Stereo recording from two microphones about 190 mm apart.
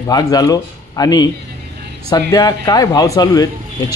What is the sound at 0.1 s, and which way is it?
Speech, 20° left (ahead or behind).